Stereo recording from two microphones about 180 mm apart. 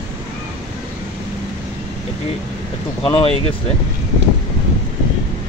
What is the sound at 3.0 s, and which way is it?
Speech, 30° left (ahead or behind).